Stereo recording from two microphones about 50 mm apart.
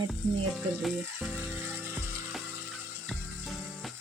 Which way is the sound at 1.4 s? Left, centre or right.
Right.